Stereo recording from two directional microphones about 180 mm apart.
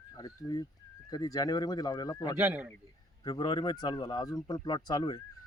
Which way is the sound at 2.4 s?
10° right (ahead or behind).